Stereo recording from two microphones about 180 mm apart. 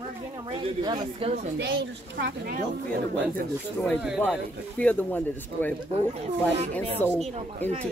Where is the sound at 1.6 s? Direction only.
75° right (ahead or behind).